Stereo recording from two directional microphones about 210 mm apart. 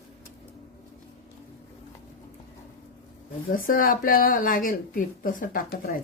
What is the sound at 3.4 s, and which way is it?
Speech, 40° left (ahead or behind).